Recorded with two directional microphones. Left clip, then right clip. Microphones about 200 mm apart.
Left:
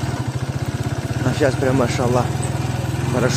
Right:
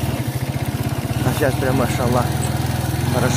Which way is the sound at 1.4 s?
30° left (ahead or behind).